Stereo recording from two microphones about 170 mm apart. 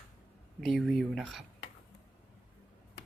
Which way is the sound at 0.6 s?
Centre (ahead or behind).